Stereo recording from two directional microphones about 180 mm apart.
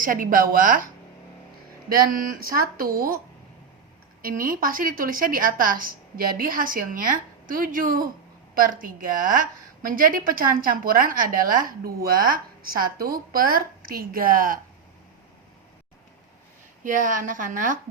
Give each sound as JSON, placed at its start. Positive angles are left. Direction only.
{"t": 0.0, "sound": "a woman's voice", "side_deg": -50}
{"t": 1.9, "sound": "a woman's voice", "side_deg": -55}
{"t": 4.2, "sound": "a woman's voice", "side_deg": -50}
{"t": 16.8, "sound": "a woman's voice", "side_deg": -45}